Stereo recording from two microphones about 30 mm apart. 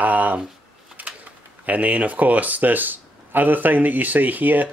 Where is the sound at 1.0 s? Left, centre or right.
Right.